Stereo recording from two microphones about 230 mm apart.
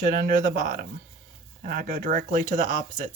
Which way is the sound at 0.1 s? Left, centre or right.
Right.